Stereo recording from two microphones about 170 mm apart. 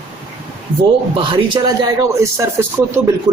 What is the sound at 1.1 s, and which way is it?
Speech, 30° right (ahead or behind).